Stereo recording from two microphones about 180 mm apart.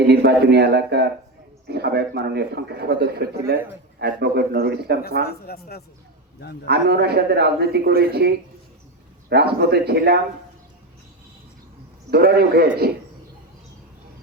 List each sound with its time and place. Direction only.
0.1 s a man's voice: 65° right (ahead or behind)
5.3 s speech: 60° left (ahead or behind)
6.7 s a man's voice: 65° right (ahead or behind)
9.3 s a man's voice: 65° right (ahead or behind)
12.1 s a man's voice: 60° right (ahead or behind)